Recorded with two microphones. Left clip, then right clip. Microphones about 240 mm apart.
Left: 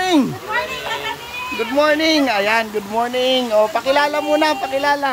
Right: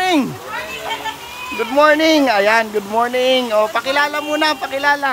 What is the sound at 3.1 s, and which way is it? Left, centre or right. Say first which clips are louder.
Speech: right 2 dB; centre.